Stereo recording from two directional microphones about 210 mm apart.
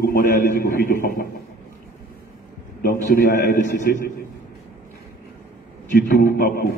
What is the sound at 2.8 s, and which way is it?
A man's voice, 45° left (ahead or behind).